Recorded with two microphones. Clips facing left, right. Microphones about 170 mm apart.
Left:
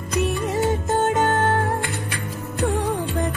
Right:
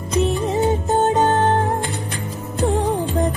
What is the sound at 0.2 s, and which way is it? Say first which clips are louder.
Music: right 3 dB; 25° right (ahead or behind).